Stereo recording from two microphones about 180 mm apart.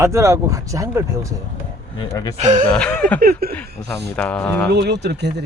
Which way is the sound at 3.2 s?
55° right (ahead or behind).